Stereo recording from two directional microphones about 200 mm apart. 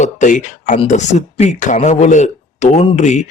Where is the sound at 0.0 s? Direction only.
40° left (ahead or behind).